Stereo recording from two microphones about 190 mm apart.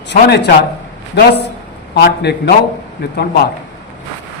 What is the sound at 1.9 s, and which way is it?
A man's voice, 60° left (ahead or behind).